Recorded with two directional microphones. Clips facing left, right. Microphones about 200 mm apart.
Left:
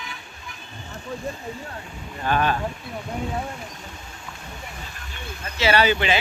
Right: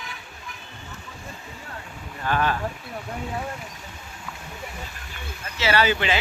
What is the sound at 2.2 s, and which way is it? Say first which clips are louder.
Speech: left 2 dB; 20° left (ahead or behind).